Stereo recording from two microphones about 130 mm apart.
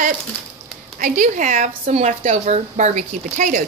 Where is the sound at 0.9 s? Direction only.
85° right.